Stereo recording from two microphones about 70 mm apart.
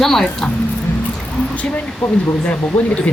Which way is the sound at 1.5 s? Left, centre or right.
Left.